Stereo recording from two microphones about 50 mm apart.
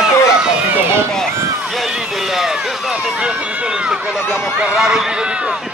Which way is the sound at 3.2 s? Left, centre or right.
Centre.